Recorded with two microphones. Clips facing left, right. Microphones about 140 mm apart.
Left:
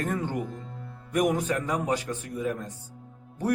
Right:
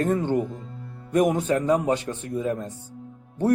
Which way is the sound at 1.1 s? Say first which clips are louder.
Right 4 dB; 25° right (ahead or behind).